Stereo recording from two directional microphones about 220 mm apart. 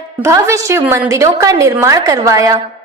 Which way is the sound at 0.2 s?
15° right (ahead or behind).